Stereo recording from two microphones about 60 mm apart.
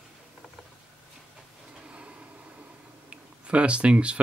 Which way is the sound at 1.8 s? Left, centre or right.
Centre.